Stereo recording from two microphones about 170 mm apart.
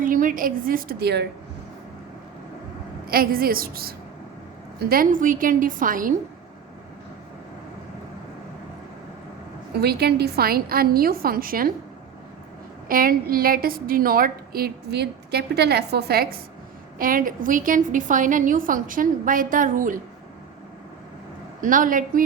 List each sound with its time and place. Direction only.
0.0 s a woman's voice: 50° right (ahead or behind); by 1.3 s 75° right (ahead or behind)
3.1 s a woman's voice: 60° right (ahead or behind)
9.7 s a woman's voice: 70° right (ahead or behind)
12.9 s a woman's voice: 55° right (ahead or behind)
17.0 s a woman's voice: 55° right (ahead or behind)
21.6 s a woman's voice: 50° right (ahead or behind)